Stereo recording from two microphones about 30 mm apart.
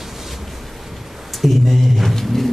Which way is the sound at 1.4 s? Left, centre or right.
Centre.